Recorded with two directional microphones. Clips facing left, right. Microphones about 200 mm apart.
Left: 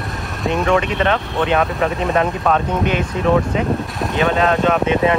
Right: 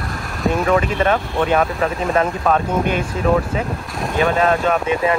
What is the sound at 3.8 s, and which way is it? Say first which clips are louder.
Speech: even; centre (ahead or behind).